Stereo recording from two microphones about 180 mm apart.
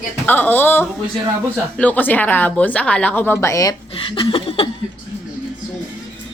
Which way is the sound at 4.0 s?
30° left (ahead or behind).